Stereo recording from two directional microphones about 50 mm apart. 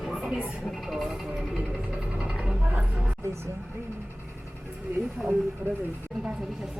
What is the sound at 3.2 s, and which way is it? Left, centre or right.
Vehicle, right.